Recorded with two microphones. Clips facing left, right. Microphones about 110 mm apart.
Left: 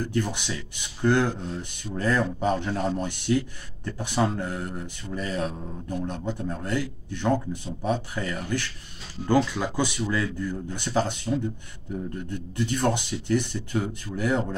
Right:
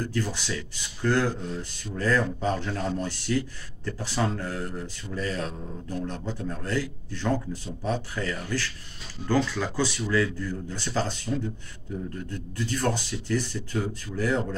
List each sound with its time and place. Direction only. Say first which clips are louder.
0.0 s a man's voice: left 2 dB; 20° left (ahead or behind)